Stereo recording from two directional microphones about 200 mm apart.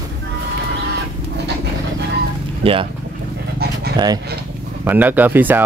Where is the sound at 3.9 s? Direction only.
20° right (ahead or behind).